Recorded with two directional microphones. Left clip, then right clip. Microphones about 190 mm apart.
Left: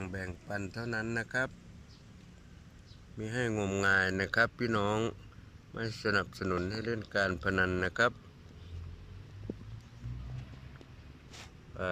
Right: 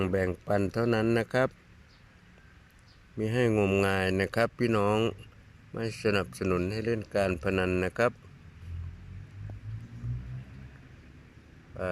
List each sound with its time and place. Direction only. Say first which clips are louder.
0.0 s speech: right 13 dB; 20° right (ahead or behind)
3.2 s speech: right 8 dB; 10° right (ahead or behind)
11.8 s speech: right 2 dB; 10° right (ahead or behind)